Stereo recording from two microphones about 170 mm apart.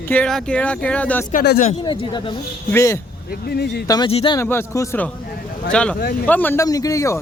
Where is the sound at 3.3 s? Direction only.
65° left (ahead or behind).